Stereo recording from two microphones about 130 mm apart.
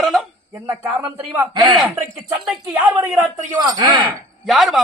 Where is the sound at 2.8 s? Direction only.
25° right (ahead or behind).